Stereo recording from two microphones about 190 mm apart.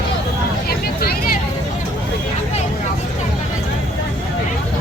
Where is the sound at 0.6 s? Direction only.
55° left (ahead or behind).